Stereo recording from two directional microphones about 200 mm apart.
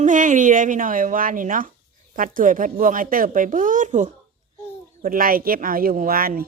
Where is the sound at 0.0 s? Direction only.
40° right (ahead or behind).